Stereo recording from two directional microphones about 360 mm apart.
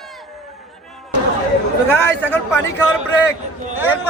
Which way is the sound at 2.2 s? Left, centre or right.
Centre.